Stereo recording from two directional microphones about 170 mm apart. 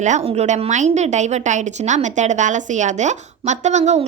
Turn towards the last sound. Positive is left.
turn(degrees=-40)  # may be behind; listen again after turning